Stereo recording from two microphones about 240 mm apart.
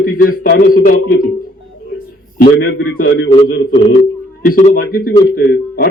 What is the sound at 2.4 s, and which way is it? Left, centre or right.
A man's voice, left.